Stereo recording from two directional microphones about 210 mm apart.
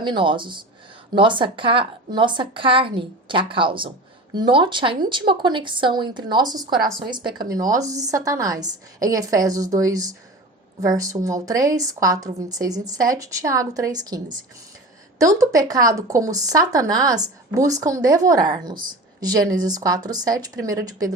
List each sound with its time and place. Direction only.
0.0 s speech: 20° right (ahead or behind)
15.2 s speech: 15° right (ahead or behind)